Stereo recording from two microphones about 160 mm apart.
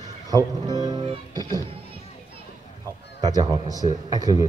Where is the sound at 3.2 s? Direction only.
25° right (ahead or behind).